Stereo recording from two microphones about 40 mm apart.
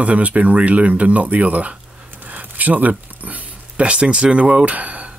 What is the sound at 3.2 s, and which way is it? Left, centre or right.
Speech, right.